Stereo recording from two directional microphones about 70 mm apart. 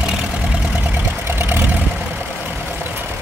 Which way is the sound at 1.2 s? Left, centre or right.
Right.